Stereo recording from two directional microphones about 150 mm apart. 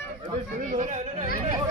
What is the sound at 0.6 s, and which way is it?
Speech, 60° right (ahead or behind).